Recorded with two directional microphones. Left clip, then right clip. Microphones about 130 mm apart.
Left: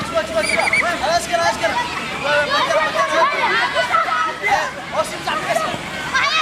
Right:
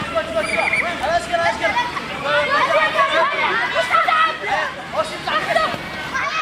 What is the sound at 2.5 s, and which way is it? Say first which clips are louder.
Chatter: right 1 dB; 5° right (ahead or behind).